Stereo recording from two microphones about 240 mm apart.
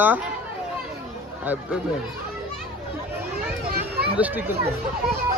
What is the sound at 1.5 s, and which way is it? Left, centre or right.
Speech, centre.